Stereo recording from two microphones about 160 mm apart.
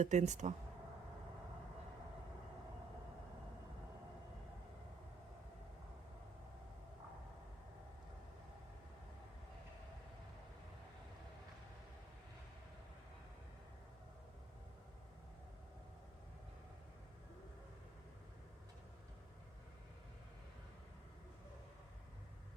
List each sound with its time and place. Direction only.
0.0 s speech: 45° right (ahead or behind)